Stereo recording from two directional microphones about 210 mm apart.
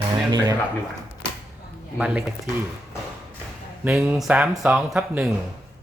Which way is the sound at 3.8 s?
5° right (ahead or behind).